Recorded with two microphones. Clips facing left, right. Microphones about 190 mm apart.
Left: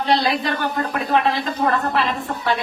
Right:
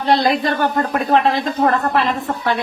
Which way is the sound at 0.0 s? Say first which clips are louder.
Right 4 dB; 45° right (ahead or behind).